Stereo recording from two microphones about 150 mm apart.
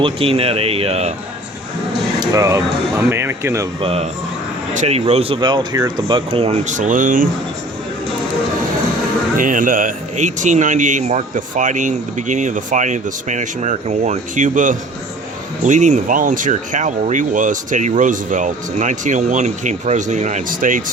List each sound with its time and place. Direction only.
0.0 s speech: 40° right (ahead or behind)
2.2 s speech: 25° right (ahead or behind)
3.8 s speech: 40° right (ahead or behind)
6.7 s a man's voice: 55° right (ahead or behind)
9.4 s a man's voice: 65° right (ahead or behind)